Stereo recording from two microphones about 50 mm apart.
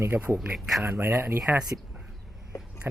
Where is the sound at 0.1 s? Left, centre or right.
Right.